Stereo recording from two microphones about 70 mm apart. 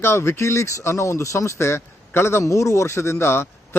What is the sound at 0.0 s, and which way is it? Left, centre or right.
Speech, left.